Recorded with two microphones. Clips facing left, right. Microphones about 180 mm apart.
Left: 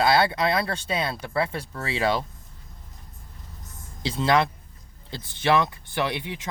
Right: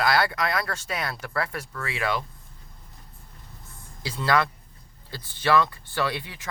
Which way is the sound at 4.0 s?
25° left (ahead or behind).